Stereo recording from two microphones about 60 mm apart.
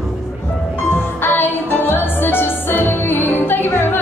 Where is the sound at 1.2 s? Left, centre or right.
Left.